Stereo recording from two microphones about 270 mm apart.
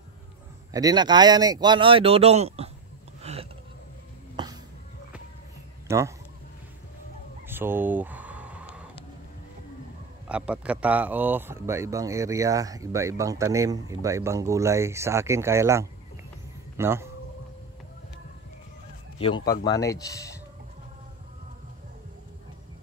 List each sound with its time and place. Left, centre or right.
0.7 s speech: centre
3.2 s a sound: right
5.9 s speech: centre
7.4 s a sound: centre
10.2 s speech: centre
19.1 s a man's voice: centre